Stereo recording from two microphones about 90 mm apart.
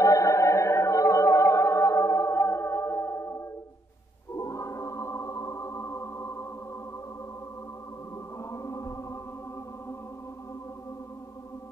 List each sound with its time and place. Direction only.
0.0 s music: 35° left (ahead or behind)
8.5 s music: 35° left (ahead or behind)